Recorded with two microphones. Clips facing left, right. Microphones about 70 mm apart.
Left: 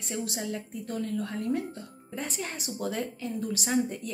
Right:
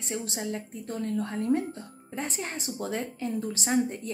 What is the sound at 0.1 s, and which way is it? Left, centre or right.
A woman's voice, right.